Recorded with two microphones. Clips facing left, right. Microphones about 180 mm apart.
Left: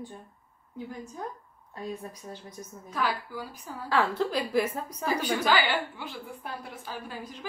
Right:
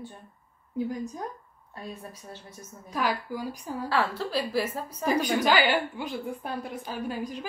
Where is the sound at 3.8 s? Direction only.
15° left (ahead or behind).